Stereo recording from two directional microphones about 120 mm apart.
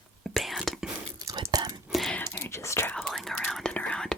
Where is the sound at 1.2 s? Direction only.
30° right (ahead or behind).